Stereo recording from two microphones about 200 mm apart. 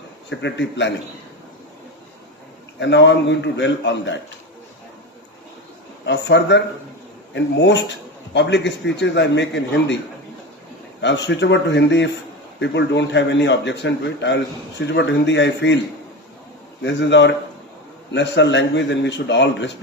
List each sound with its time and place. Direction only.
0.3 s speech: 65° left (ahead or behind)
2.7 s speech: 65° left (ahead or behind)
6.1 s speech: 60° left (ahead or behind)
11.0 s speech: 60° left (ahead or behind)
16.8 s speech: 60° left (ahead or behind)